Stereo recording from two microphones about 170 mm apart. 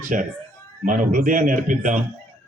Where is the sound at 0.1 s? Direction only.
50° right (ahead or behind).